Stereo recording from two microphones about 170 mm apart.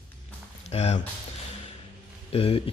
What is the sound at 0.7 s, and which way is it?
Speech, 40° left (ahead or behind).